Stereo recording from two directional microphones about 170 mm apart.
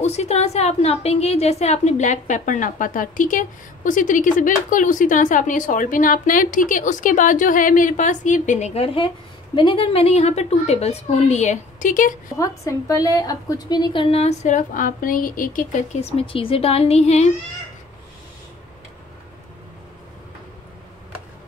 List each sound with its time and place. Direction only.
0.0 s a woman's voice: 40° left (ahead or behind)
12.4 s a woman's voice: 20° left (ahead or behind)
14.1 s speech: 40° left (ahead or behind)